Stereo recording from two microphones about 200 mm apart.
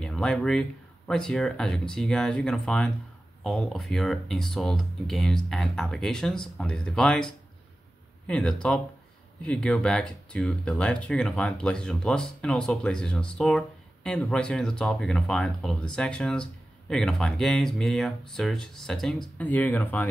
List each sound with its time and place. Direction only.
0.0 s speech: 5° left (ahead or behind)